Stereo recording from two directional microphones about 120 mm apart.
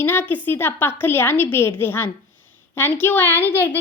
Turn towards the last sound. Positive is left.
turn(degrees=15)  # may be behind; listen again after turning